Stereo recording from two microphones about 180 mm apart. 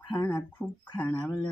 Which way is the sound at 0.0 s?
25° left (ahead or behind).